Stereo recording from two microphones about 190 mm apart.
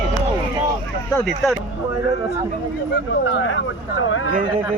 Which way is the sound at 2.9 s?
80° left.